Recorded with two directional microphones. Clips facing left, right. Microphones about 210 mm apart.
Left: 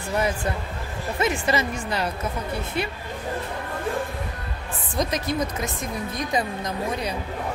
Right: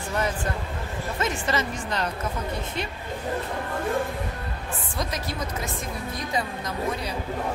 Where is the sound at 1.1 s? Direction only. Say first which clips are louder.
Left 4 dB; 10° left (ahead or behind).